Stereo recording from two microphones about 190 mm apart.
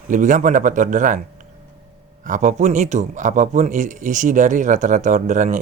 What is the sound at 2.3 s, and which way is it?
A man's voice, 40° right (ahead or behind).